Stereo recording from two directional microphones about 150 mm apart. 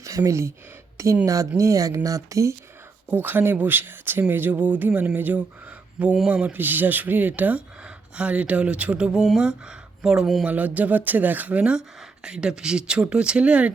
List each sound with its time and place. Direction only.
0.0 s speech: 20° right (ahead or behind)